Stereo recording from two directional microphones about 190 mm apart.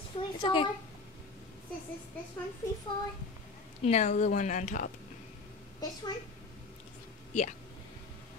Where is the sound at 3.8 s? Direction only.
35° left (ahead or behind).